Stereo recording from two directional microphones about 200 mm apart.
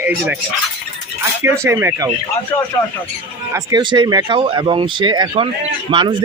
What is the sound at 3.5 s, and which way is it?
Speech, 20° right (ahead or behind).